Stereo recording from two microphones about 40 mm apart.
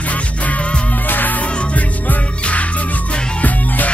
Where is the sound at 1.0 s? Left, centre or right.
Left.